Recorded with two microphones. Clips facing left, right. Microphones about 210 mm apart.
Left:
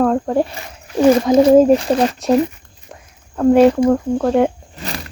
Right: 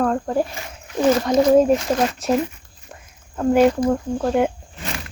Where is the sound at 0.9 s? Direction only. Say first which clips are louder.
Left 5 dB; 30° left (ahead or behind).